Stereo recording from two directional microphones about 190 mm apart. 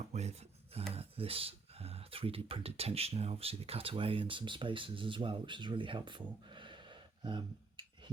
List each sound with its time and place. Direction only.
0.1 s filing: 35° right (ahead or behind)
0.9 s speech: 30° right (ahead or behind)